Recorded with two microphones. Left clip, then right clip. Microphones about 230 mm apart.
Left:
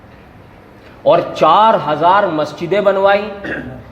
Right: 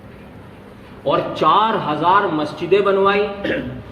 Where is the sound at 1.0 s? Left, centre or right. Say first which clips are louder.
Left 6 dB; left.